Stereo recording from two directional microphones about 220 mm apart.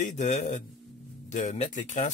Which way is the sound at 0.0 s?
35° left (ahead or behind).